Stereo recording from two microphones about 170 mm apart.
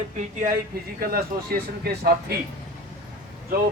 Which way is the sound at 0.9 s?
60° right (ahead or behind).